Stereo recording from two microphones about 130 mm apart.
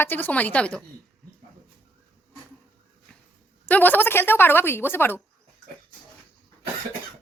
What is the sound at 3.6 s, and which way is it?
A woman's voice, 15° left (ahead or behind).